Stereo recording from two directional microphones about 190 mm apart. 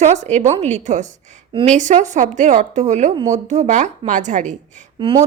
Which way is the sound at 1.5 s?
25° right (ahead or behind).